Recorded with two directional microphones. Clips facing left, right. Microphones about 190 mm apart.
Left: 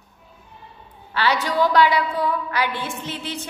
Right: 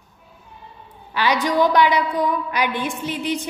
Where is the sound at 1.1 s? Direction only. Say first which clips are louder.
Right 2 dB; 15° right (ahead or behind).